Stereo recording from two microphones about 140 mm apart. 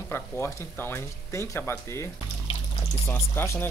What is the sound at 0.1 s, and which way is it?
Speech, 15° left (ahead or behind).